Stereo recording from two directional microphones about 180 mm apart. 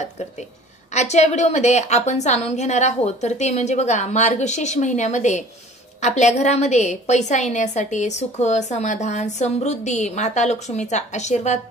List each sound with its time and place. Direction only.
0.9 s a woman's voice: 40° left (ahead or behind)